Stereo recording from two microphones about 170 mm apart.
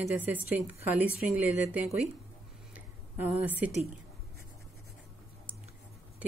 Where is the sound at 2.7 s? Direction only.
10° right (ahead or behind).